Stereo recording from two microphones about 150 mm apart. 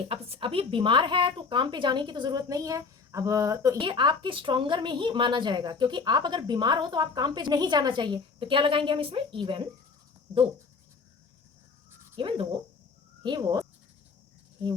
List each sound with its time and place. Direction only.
0.1 s speech: 40° right (ahead or behind)
12.1 s speech: 35° right (ahead or behind)